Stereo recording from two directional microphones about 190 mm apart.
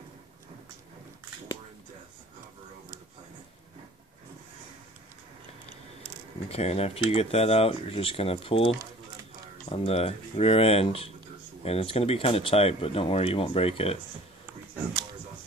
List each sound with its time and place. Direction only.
6.5 s speech: 35° left (ahead or behind)